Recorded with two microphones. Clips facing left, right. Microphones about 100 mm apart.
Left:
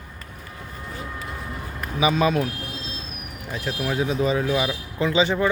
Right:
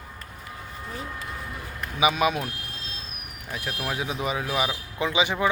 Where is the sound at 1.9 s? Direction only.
15° right (ahead or behind).